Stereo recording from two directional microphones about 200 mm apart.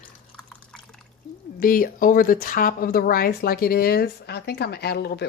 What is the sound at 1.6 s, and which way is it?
Speech, 45° left (ahead or behind).